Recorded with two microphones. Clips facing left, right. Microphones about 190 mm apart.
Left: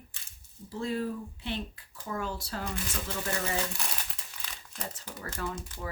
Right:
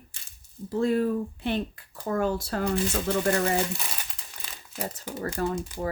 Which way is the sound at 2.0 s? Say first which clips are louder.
Right 9 dB; 50° right (ahead or behind).